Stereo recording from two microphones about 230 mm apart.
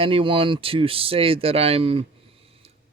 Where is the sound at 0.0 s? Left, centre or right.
Right.